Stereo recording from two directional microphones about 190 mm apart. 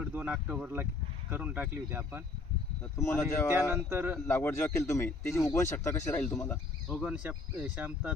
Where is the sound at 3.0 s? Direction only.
15° left (ahead or behind).